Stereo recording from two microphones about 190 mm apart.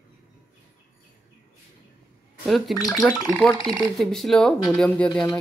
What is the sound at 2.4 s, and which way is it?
Speech, centre (ahead or behind).